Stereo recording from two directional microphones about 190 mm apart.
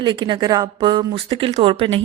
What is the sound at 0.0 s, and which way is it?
Speech, 25° right (ahead or behind).